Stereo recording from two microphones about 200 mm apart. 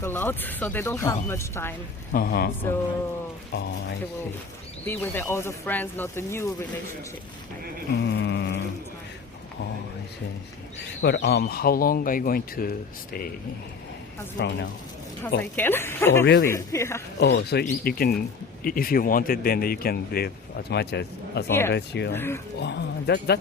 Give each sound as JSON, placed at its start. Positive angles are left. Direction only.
{"t": 0.0, "sound": "speech", "side_deg": 10}
{"t": 2.1, "sound": "speech", "side_deg": 50}
{"t": 3.5, "sound": "speech", "side_deg": 60}
{"t": 4.9, "sound": "speech", "side_deg": 10}
{"t": 8.0, "sound": "mantra", "side_deg": 60}
{"t": 11.0, "sound": "speech", "side_deg": 55}
{"t": 14.4, "sound": "speech", "side_deg": 55}
{"t": 15.4, "sound": "speech", "side_deg": 10}
{"t": 16.2, "sound": "speech", "side_deg": 60}
{"t": 16.5, "sound": "speech", "side_deg": 15}
{"t": 17.2, "sound": "speech", "side_deg": 55}
{"t": 22.1, "sound": "speech", "side_deg": 10}
{"t": 22.6, "sound": "speech", "side_deg": 60}